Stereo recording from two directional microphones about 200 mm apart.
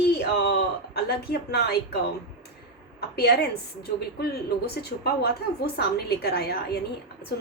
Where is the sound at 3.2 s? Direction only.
55° left (ahead or behind).